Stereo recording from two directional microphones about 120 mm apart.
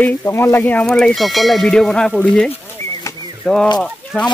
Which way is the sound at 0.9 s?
5° left (ahead or behind).